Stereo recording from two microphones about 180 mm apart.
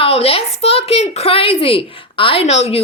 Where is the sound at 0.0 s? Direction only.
35° left (ahead or behind).